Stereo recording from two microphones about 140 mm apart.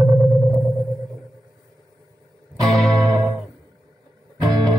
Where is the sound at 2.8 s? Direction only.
5° left (ahead or behind).